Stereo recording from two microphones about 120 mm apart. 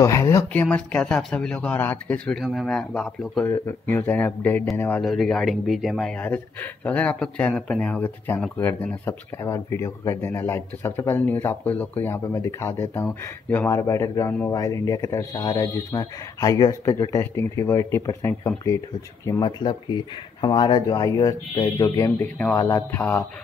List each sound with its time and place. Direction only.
0.0 s speech: 25° left (ahead or behind)
0.5 s speech: 10° left (ahead or behind)
3.4 s speech: 20° left (ahead or behind)
5.0 s speech: centre (ahead or behind); by 18.5 s 20° left (ahead or behind)
19.4 s speech: 40° left (ahead or behind)
22.2 s speech: 15° left (ahead or behind)